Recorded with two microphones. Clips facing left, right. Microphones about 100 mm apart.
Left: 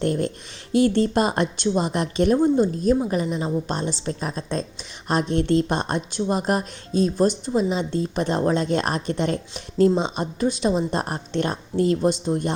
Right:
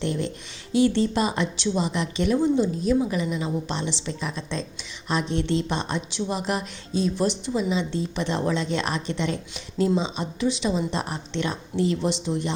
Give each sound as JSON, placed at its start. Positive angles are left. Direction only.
{"t": 0.0, "sound": "a woman's voice", "side_deg": 50}